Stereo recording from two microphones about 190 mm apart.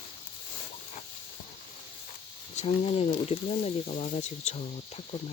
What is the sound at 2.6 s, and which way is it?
Speech, 35° left (ahead or behind).